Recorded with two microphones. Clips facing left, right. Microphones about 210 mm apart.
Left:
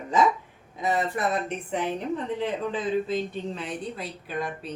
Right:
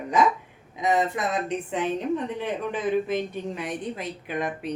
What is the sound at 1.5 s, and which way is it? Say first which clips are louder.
A woman's voice: right 2 dB; 15° right (ahead or behind).